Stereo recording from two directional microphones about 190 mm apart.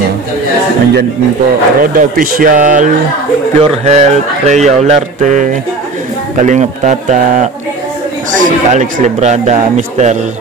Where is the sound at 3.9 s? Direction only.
35° right (ahead or behind).